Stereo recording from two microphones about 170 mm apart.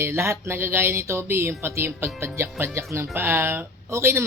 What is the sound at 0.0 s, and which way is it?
Speech, 15° right (ahead or behind).